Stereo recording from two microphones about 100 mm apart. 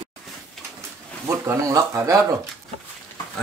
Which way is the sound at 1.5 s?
30° right (ahead or behind).